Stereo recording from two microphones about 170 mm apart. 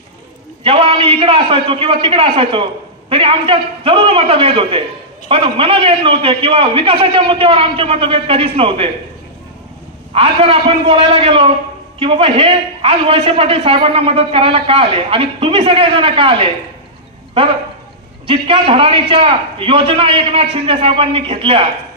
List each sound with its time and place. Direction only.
0.7 s a man's voice: 35° right (ahead or behind)
10.1 s a man's voice: 35° right (ahead or behind)
18.2 s a man's voice: 30° right (ahead or behind)